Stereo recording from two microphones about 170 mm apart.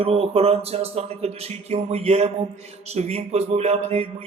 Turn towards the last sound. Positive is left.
turn(degrees=-35)  # may be behind; listen again after turning